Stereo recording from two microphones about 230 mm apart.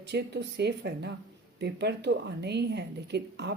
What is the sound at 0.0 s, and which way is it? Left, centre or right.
Speech, right.